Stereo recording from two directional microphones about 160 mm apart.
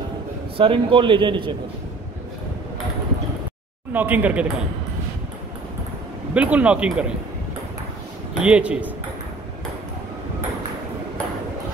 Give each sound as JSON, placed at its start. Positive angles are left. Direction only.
{"t": 0.6, "sound": "a man's voice", "side_deg": -35}
{"t": 3.9, "sound": "speech", "side_deg": -10}
{"t": 6.3, "sound": "speech", "side_deg": -10}
{"t": 8.4, "sound": "speech", "side_deg": -5}